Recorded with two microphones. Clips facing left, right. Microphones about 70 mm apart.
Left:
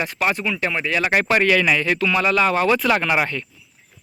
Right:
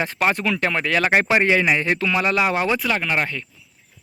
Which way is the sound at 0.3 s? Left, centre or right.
Right.